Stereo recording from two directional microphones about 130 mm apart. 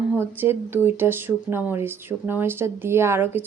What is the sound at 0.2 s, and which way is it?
Speech, 15° right (ahead or behind).